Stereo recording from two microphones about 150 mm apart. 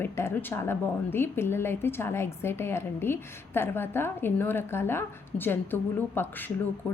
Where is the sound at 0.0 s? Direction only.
15° left (ahead or behind).